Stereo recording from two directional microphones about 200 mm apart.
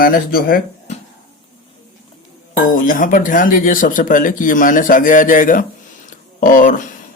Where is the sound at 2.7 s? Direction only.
40° left (ahead or behind).